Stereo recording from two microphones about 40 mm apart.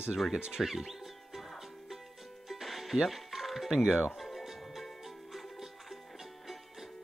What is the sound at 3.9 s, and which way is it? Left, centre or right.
Speech, centre.